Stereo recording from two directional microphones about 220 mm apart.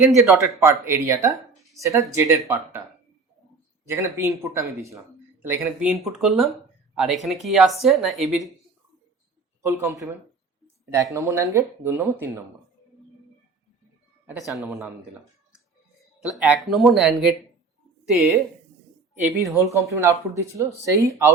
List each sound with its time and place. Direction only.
0.6 s speech: 10° right (ahead or behind)
3.8 s speech: 10° right (ahead or behind)
9.8 s speech: 15° right (ahead or behind)
14.3 s speech: centre (ahead or behind)
16.2 s speech: 5° right (ahead or behind)